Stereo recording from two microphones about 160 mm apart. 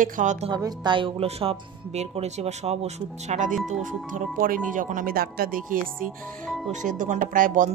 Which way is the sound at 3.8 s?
60° right (ahead or behind).